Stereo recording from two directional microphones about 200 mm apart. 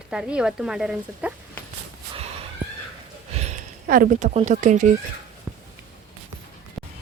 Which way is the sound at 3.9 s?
40° right (ahead or behind).